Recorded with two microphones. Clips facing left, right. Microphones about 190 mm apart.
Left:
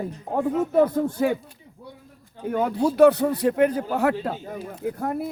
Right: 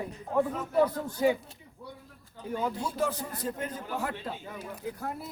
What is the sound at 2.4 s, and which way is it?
A man's voice, 65° left (ahead or behind).